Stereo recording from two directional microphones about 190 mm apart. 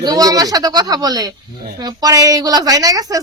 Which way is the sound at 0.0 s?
20° right (ahead or behind).